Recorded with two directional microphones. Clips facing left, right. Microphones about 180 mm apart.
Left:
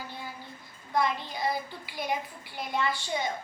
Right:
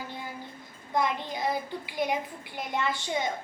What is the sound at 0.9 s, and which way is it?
Child singing, 20° right (ahead or behind).